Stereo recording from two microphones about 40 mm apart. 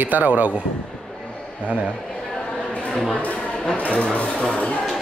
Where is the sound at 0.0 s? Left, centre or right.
Right.